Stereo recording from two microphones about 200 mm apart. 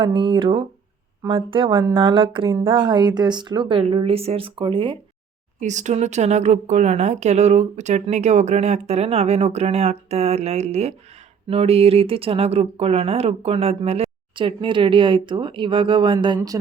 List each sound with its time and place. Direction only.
0.0 s speech: 25° right (ahead or behind)
5.5 s speech: 35° right (ahead or behind); by 16.6 s 20° right (ahead or behind)